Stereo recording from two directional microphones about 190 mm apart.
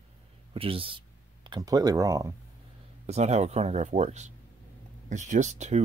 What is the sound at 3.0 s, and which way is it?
Speech, 35° right (ahead or behind).